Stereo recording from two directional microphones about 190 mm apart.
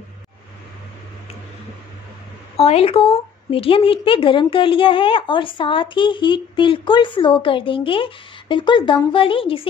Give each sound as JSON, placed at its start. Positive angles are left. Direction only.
{"t": 2.5, "sound": "a woman's voice", "side_deg": 30}